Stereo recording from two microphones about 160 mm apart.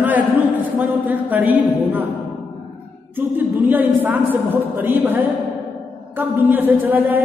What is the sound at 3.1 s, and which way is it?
A man's voice, 10° right (ahead or behind).